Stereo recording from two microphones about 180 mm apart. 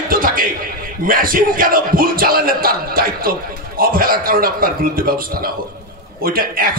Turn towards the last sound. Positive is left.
turn(degrees=-55)  # may be behind; listen again after turning